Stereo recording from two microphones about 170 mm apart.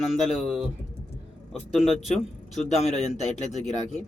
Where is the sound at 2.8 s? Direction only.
40° left (ahead or behind).